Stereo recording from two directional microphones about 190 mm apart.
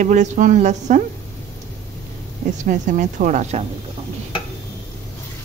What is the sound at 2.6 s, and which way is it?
A woman's voice, 40° right (ahead or behind).